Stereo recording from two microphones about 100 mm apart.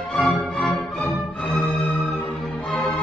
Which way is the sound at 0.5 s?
Centre (ahead or behind).